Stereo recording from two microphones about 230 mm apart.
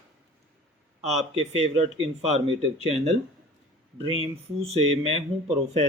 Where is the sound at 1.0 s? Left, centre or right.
Right.